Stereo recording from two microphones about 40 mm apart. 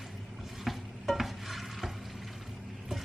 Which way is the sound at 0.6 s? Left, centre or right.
Centre.